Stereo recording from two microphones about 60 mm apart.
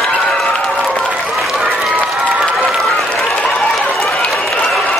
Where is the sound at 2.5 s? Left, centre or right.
Centre.